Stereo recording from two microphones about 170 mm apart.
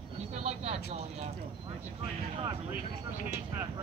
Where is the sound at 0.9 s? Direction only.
40° right (ahead or behind).